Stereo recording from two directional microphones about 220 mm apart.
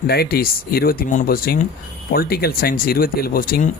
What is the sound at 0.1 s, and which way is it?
Speech, 45° left (ahead or behind).